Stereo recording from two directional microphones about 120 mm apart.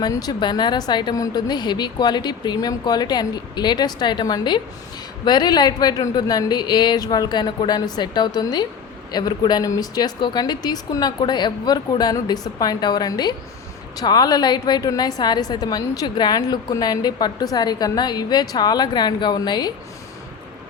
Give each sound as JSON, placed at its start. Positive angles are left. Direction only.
{"t": 0.0, "sound": "a woman's voice", "side_deg": 35}